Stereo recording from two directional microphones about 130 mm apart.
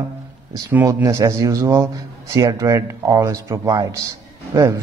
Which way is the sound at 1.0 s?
25° right (ahead or behind).